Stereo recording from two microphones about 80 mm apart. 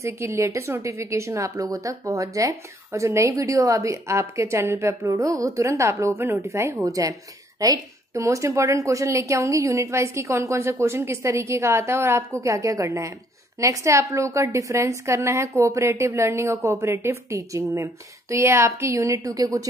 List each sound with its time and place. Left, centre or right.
0.0 s a woman's voice: right